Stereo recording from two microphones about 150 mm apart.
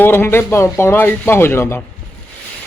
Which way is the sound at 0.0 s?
15° left (ahead or behind).